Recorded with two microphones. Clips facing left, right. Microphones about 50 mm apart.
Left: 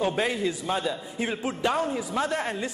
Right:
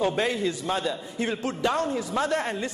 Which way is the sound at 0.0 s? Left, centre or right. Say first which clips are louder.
Right 1 dB; centre.